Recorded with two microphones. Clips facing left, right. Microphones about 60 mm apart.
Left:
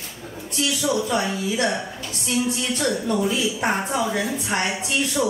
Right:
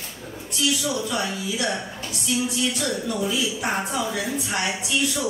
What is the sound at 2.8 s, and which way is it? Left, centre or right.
A woman's voice, left.